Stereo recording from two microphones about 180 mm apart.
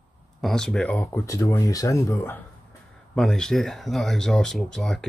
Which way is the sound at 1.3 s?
20° left (ahead or behind).